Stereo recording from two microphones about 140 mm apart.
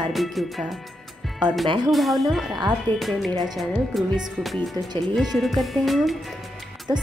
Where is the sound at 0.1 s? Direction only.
Centre (ahead or behind).